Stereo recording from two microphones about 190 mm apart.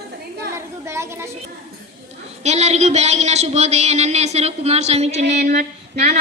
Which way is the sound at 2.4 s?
35° right (ahead or behind).